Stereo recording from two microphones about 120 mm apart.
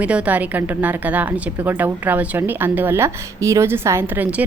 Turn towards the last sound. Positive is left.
turn(degrees=-15)  # may be behind; listen again after turning